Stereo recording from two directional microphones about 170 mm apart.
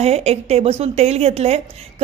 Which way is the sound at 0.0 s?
40° right (ahead or behind).